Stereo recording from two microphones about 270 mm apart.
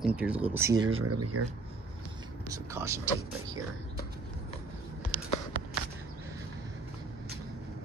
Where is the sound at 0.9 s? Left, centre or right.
Right.